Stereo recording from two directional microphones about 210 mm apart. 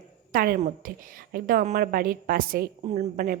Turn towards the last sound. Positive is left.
turn(degrees=-40)  # may be behind; listen again after turning